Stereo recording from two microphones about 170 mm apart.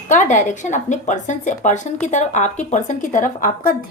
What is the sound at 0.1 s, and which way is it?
Speech, 45° left (ahead or behind).